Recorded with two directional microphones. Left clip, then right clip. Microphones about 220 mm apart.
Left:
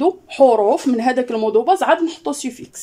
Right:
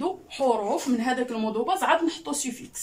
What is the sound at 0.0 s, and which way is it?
Speech, 50° left (ahead or behind).